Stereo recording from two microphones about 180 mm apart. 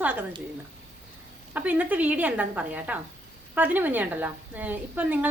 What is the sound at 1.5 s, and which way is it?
A woman's voice, 10° right (ahead or behind).